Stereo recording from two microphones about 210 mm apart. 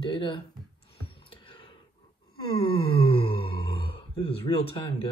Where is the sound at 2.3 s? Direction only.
25° left (ahead or behind).